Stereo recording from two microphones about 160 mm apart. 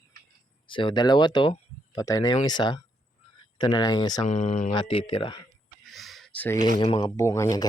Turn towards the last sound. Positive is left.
turn(degrees=25)  # may be behind; listen again after turning